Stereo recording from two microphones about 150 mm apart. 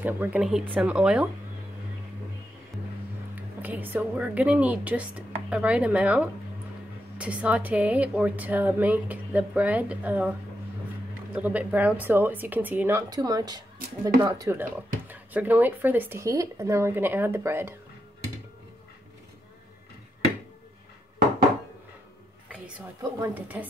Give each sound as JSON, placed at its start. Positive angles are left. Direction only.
{"t": 0.0, "sound": "speech", "side_deg": -10}
{"t": 3.3, "sound": "speech", "side_deg": -10}
{"t": 11.3, "sound": "speech", "side_deg": -10}
{"t": 13.1, "sound": "a woman's voice", "side_deg": -25}
{"t": 23.2, "sound": "speech", "side_deg": -10}